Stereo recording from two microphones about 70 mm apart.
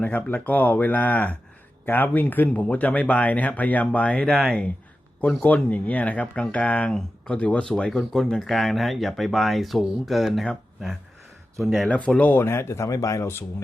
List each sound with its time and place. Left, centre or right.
0.0 s speech: left; by 4.7 s centre
5.7 s speech: left; by 10.5 s centre
11.6 s speech: centre
11.9 s speech: centre
12.4 s speech: left